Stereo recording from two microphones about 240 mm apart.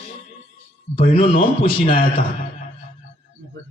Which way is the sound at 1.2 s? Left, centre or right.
Left.